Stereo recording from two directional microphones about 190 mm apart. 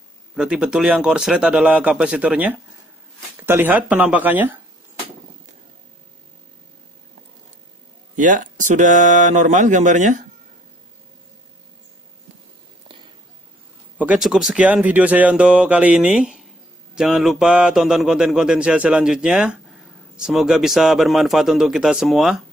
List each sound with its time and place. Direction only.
0.4 s speech: 5° right (ahead or behind)
8.2 s speech: 40° right (ahead or behind)
13.9 s speech: 5° right (ahead or behind)